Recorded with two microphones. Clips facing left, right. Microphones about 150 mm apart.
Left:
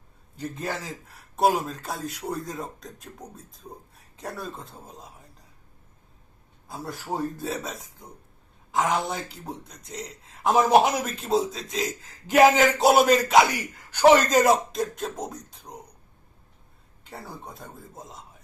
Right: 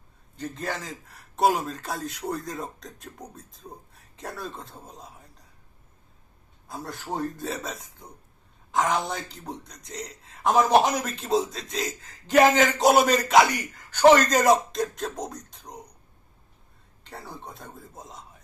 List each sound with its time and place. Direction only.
0.3 s a man's voice: 10° left (ahead or behind)
6.7 s a man's voice: 5° left (ahead or behind)
17.0 s a man's voice: centre (ahead or behind)